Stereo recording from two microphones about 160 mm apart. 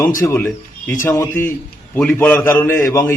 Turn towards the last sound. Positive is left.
turn(degrees=20)  # may be behind; listen again after turning